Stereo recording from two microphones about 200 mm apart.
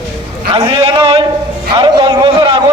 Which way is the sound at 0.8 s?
25° right (ahead or behind).